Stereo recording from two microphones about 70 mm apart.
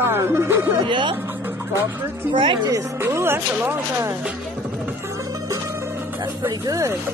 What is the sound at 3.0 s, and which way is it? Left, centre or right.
Speech, right.